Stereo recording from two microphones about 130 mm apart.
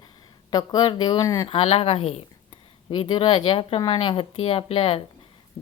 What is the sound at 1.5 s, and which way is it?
Speech, 45° left (ahead or behind).